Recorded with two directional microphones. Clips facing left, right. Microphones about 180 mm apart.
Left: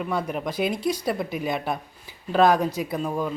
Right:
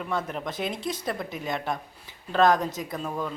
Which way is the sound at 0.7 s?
25° right (ahead or behind).